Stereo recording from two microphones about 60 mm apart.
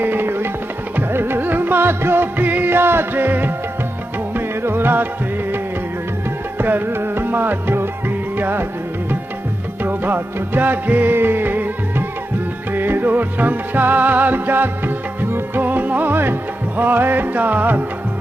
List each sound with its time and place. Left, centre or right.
0.0 s music: right
6.6 s music: right
9.8 s music: right